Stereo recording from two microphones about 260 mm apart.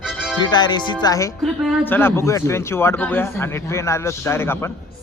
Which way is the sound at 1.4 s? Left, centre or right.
Centre.